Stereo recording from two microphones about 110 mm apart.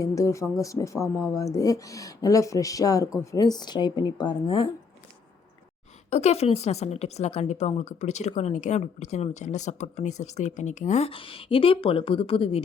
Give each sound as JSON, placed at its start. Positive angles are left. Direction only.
{"t": 0.0, "sound": "speech", "side_deg": 30}
{"t": 6.1, "sound": "a woman's voice", "side_deg": 90}
{"t": 11.1, "sound": "a woman's voice", "side_deg": 55}